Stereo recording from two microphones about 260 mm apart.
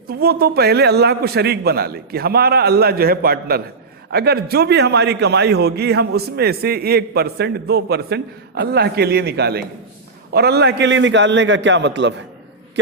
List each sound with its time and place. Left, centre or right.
0.1 s a man's voice: right